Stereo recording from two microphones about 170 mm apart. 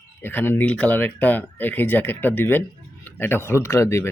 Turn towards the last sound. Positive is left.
turn(degrees=15)  # may be behind; listen again after turning